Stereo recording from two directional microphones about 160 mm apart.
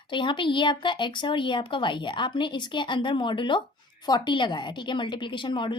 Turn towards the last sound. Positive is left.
turn(degrees=30)  # may be behind; listen again after turning